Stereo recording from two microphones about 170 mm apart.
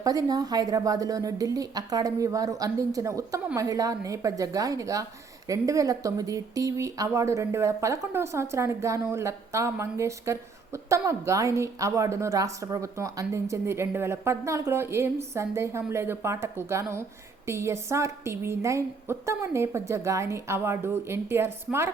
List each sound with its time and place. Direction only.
0.0 s a woman's voice: 20° right (ahead or behind)